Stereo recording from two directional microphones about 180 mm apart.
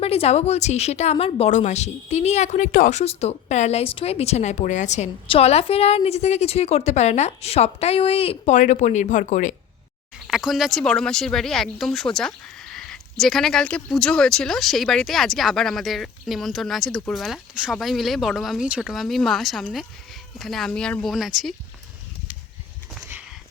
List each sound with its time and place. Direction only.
0.0 s a woman's voice: 35° left (ahead or behind)
10.2 s speech: centre (ahead or behind)
23.0 s a sound: 10° right (ahead or behind)